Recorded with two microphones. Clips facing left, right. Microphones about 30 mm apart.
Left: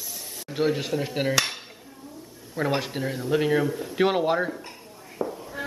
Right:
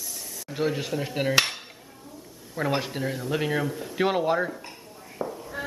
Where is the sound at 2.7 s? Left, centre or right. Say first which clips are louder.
Even; centre.